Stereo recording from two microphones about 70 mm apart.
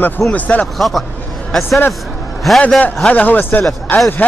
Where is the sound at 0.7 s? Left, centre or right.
Centre.